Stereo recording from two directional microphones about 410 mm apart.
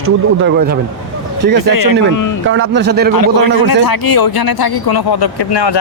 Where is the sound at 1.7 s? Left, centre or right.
Left.